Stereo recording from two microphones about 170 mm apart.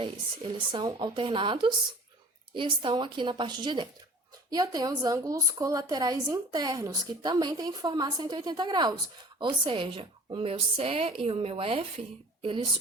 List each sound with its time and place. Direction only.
0.0 s a woman's voice: 30° right (ahead or behind)